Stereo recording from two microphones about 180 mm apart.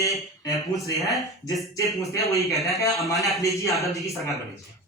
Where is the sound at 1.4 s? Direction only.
15° left (ahead or behind).